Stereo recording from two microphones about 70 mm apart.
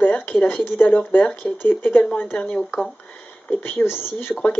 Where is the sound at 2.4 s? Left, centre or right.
Centre.